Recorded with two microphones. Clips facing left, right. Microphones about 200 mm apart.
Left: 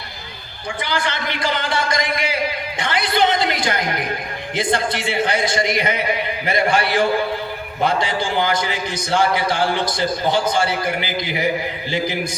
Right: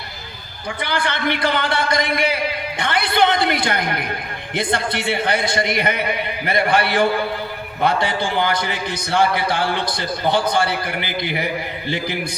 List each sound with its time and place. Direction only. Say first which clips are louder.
0.8 s a man's voice: right 1 dB; 60° right (ahead or behind)